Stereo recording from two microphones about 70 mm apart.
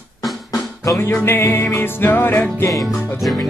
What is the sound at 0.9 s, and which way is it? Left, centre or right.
Music, left.